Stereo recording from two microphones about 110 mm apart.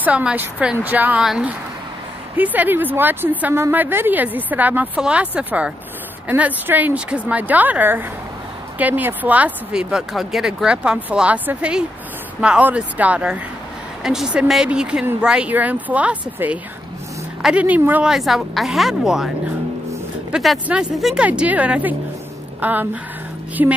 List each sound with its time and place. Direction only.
0.0 s speech: 10° right (ahead or behind)
1.2 s a woman's voice: 5° right (ahead or behind)
2.3 s a woman's voice: 15° right (ahead or behind)
18.0 s a woman's voice: 5° right (ahead or behind)
23.6 s music: 20° right (ahead or behind)